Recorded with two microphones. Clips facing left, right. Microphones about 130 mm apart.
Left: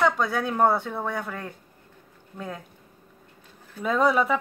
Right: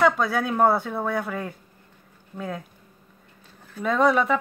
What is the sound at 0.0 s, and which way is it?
Speech, 5° right (ahead or behind).